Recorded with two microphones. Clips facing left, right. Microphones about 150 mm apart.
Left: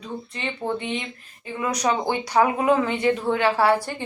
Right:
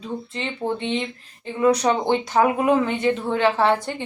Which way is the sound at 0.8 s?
25° right (ahead or behind).